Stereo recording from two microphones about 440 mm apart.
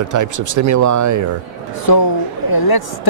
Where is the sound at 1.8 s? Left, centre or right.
Left.